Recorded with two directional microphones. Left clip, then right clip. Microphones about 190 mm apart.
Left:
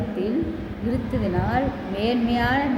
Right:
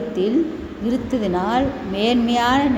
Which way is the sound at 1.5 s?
35° right (ahead or behind).